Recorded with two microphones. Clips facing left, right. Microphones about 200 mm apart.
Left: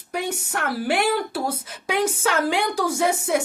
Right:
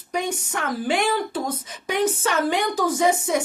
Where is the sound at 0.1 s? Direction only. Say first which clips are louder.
Right 1 dB; 5° left (ahead or behind).